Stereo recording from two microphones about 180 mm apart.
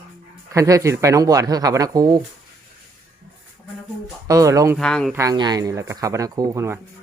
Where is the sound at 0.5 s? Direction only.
20° right (ahead or behind).